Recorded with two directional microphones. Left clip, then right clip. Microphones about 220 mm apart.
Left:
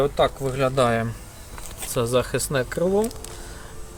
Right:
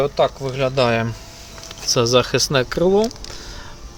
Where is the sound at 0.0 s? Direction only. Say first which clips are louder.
Right 3 dB; 10° right (ahead or behind).